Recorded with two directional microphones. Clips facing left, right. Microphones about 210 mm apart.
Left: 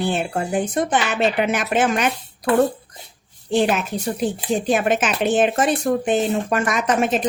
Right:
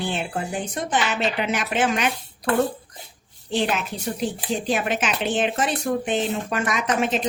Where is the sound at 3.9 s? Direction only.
50° left (ahead or behind).